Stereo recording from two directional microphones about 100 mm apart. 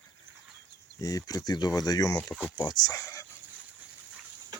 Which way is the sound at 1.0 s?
40° left (ahead or behind).